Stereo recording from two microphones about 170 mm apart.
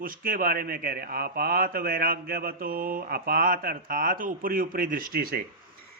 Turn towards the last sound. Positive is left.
turn(degrees=-65)  # may be behind; listen again after turning